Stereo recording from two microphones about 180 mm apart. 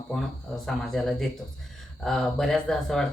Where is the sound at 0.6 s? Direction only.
Centre (ahead or behind).